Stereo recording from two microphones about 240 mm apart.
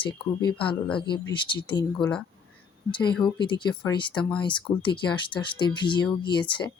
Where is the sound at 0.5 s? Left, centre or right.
Centre.